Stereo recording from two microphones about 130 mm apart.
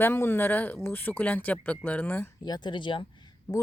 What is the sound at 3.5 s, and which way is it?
Speech, 30° left (ahead or behind).